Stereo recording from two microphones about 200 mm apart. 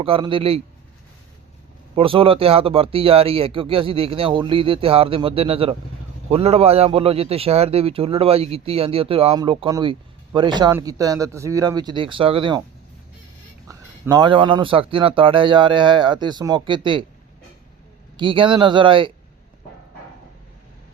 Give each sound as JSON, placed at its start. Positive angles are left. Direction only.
{"t": 0.0, "sound": "a man's voice", "side_deg": -25}
{"t": 2.0, "sound": "a man's voice", "side_deg": -25}
{"t": 13.7, "sound": "a man's voice", "side_deg": -15}
{"t": 18.2, "sound": "a man's voice", "side_deg": -25}